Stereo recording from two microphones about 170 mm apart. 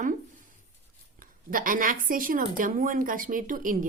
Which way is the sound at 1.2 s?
55° right (ahead or behind).